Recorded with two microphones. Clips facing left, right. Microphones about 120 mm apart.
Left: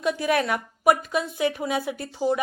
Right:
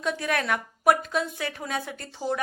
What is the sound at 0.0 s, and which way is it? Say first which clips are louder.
A woman's voice: left 4 dB; 5° left (ahead or behind).